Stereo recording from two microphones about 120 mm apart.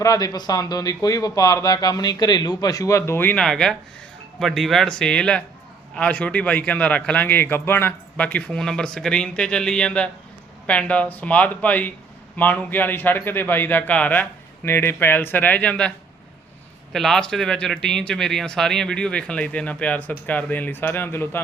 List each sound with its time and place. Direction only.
0.0 s speech: 30° left (ahead or behind)
3.4 s speech: 5° left (ahead or behind)
16.9 s speech: 5° left (ahead or behind)